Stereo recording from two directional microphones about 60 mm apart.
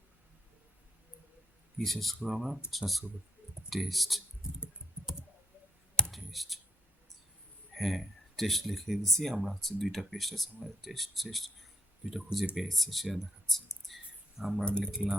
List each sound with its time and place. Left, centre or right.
1.8 s speech: centre
6.1 s clicking: centre
7.7 s speech: centre
14.6 s speech: centre